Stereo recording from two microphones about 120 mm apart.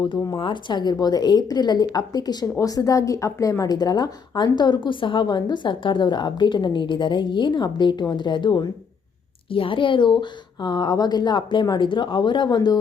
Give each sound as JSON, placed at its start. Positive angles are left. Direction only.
{"t": 0.3, "sound": "a woman's voice", "side_deg": 40}